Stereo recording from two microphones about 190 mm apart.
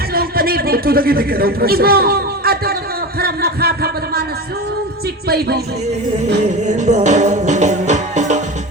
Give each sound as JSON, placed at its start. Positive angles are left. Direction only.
{"t": 0.1, "sound": "a sound", "side_deg": -50}
{"t": 5.3, "sound": "speech", "side_deg": -55}
{"t": 6.6, "sound": "music", "side_deg": -40}